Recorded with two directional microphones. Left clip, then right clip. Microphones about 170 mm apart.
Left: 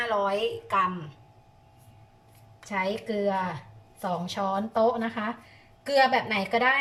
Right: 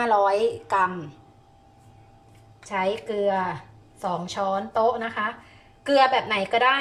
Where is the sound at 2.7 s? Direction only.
10° right (ahead or behind).